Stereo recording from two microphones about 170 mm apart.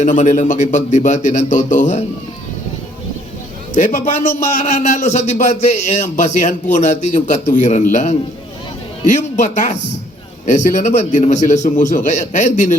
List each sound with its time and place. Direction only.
0.0 s a man's voice: 45° left (ahead or behind)
3.8 s a man's voice: 50° left (ahead or behind)
9.3 s a man's voice: 45° left (ahead or behind)